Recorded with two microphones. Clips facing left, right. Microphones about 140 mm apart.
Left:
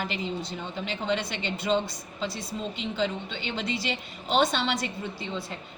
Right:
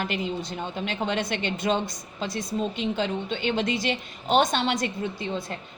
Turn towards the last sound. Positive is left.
turn(degrees=-50)  # may be behind; listen again after turning